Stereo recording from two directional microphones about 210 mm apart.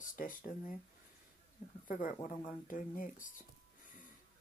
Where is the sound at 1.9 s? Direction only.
40° left (ahead or behind).